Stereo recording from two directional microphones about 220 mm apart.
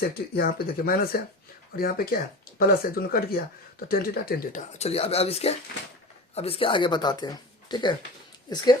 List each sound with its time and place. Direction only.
0.0 s speech: 40° left (ahead or behind); by 7.9 s 20° left (ahead or behind)